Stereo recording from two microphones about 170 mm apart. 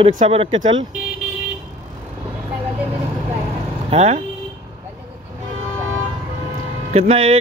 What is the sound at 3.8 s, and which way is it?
Speech, 40° right (ahead or behind).